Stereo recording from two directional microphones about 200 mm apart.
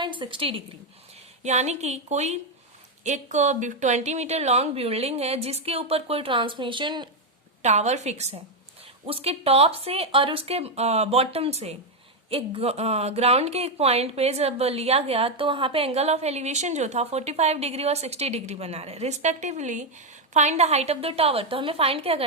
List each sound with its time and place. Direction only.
0.0 s a woman's voice: 25° right (ahead or behind)
7.6 s a woman's voice: 35° right (ahead or behind)